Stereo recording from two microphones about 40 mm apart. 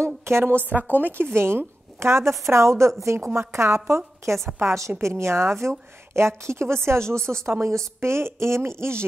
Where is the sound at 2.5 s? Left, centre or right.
Right.